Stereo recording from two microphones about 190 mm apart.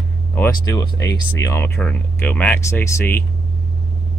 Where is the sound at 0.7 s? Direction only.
15° left (ahead or behind).